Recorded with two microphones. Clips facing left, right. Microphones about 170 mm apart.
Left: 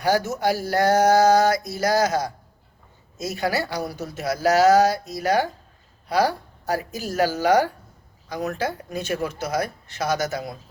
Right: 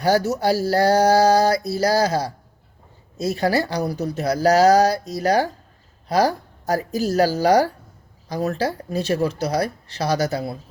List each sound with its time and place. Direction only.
0.0 s speech: 40° right (ahead or behind)